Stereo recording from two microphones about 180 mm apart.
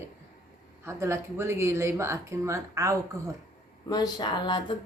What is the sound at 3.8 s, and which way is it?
Speech, 25° left (ahead or behind).